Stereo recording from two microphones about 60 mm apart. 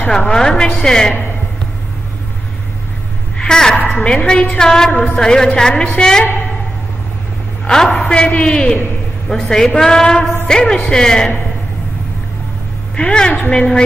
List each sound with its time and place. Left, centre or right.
0.0 s a woman's voice: centre
3.3 s a woman's voice: centre
7.6 s a woman's voice: centre
12.9 s a woman's voice: centre